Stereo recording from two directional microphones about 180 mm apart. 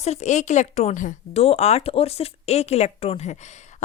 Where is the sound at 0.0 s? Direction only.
40° left (ahead or behind).